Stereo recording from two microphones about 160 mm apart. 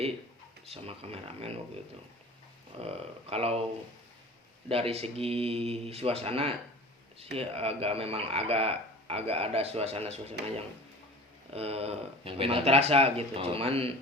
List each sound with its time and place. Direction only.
0.7 s speech: 40° right (ahead or behind)
2.8 s speech: 40° right (ahead or behind)
4.7 s speech: 40° right (ahead or behind)
11.5 s speech: 40° right (ahead or behind)